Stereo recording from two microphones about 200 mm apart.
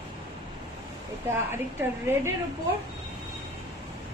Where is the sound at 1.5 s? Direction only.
10° right (ahead or behind).